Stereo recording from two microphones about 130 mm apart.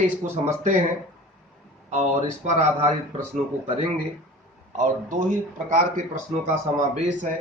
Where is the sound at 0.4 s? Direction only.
65° right (ahead or behind).